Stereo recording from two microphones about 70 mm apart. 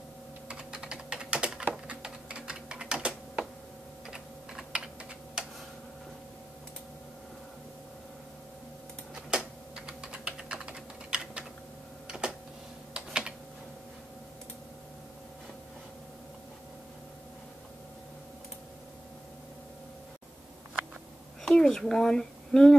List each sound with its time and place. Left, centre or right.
0.5 s typing: centre
9.1 s typing: centre
12.1 s a sound: centre
12.9 s computer keyboard: centre
21.5 s speech: centre